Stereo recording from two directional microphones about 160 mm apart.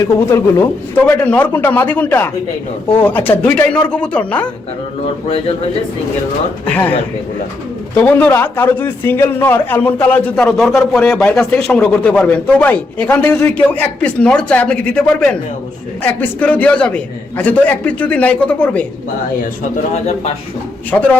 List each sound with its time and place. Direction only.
0.3 s a man's voice: 15° left (ahead or behind)
7.9 s a man's voice: 10° left (ahead or behind)
19.9 s a man's voice: 45° left (ahead or behind)
20.9 s a man's voice: 10° left (ahead or behind)